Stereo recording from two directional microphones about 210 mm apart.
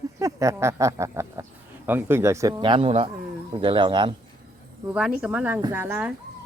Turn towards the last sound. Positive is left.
turn(degrees=-10)  # may be behind; listen again after turning